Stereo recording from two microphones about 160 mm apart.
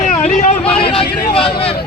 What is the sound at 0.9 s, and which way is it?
Speech, 35° left (ahead or behind).